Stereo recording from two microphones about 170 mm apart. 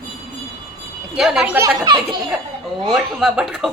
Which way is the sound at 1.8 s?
25° right (ahead or behind).